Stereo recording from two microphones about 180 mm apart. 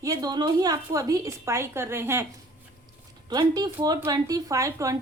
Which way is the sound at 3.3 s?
20° right (ahead or behind).